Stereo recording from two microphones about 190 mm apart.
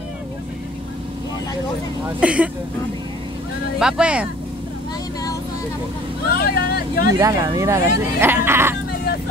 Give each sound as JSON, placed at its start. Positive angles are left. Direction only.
{"t": 2.1, "sound": "speech", "side_deg": -5}
{"t": 3.8, "sound": "speech", "side_deg": -5}
{"t": 6.3, "sound": "speech", "side_deg": 55}
{"t": 7.2, "sound": "speech", "side_deg": -20}